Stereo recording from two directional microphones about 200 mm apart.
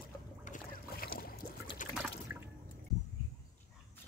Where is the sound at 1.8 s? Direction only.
40° left (ahead or behind).